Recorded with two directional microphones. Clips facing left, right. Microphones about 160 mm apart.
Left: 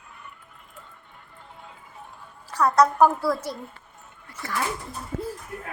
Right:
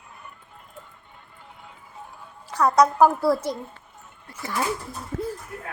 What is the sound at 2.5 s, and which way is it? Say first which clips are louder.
A woman's voice: right 1 dB; 15° right (ahead or behind).